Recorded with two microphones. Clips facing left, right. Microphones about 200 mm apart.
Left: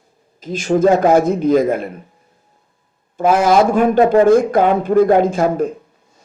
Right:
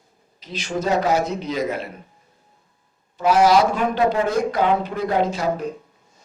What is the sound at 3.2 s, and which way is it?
A man's voice, 50° left (ahead or behind).